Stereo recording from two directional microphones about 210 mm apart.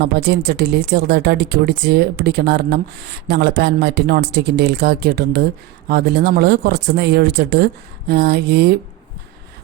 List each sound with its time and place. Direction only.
0.0 s speech: 50° right (ahead or behind)